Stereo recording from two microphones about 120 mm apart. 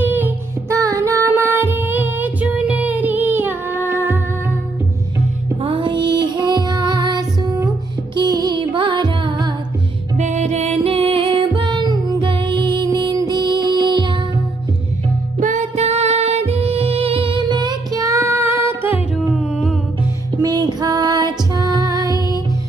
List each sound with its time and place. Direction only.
0.0 s music: 15° right (ahead or behind)
0.7 s music: 25° right (ahead or behind)
5.6 s music: 50° right (ahead or behind)
10.1 s music: 85° right; by 14.1 s 40° right (ahead or behind)
15.4 s music: 80° right; by 17.4 s 50° right (ahead or behind)
17.5 s music: 30° right (ahead or behind)
19.3 s music: centre (ahead or behind)
20.3 s music: 35° right (ahead or behind)